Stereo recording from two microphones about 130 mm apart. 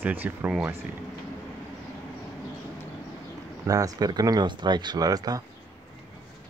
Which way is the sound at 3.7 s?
25° right (ahead or behind).